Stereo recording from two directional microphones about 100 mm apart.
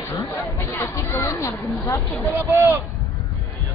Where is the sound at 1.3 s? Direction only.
30° left (ahead or behind).